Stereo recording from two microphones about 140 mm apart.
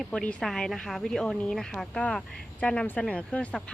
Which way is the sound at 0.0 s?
5° left (ahead or behind).